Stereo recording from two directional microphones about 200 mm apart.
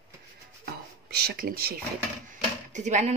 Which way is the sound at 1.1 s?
50° right (ahead or behind).